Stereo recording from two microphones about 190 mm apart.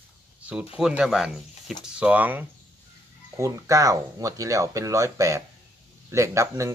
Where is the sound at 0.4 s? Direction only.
5° right (ahead or behind).